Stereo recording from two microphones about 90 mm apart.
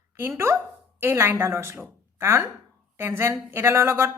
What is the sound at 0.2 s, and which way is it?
A woman's voice, 30° right (ahead or behind).